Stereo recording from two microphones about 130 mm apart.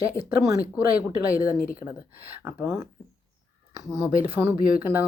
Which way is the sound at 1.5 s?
90° left.